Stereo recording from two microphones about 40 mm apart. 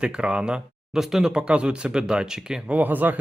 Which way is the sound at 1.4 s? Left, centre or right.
Right.